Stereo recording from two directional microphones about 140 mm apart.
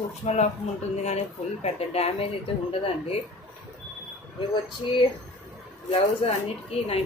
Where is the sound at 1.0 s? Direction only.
50° left (ahead or behind).